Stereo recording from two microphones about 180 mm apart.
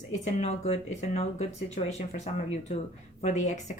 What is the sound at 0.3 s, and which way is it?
A woman's voice, 35° left (ahead or behind).